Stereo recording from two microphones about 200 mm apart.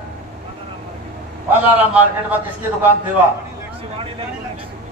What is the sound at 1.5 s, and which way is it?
Speech, 10° right (ahead or behind).